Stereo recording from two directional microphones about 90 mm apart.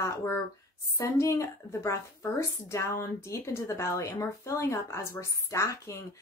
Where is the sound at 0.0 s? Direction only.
30° left (ahead or behind).